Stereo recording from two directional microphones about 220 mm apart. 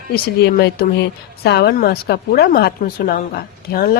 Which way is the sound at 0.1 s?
45° left (ahead or behind).